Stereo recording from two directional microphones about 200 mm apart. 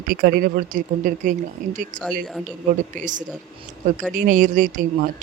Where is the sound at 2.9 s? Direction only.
40° right (ahead or behind).